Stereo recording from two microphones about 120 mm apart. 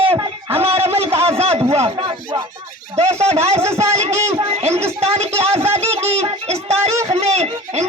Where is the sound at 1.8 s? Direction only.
45° right (ahead or behind).